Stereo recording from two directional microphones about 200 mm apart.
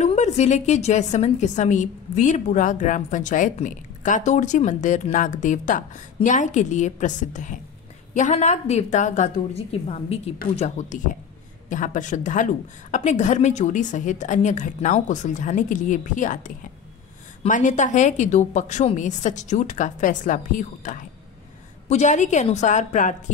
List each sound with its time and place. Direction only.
0.0 s a woman's voice: 35° left (ahead or behind)